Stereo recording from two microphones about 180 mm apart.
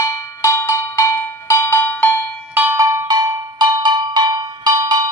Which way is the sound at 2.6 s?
15° right (ahead or behind).